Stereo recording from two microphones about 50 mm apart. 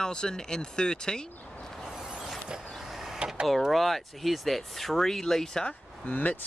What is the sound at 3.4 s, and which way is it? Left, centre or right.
Speech, centre.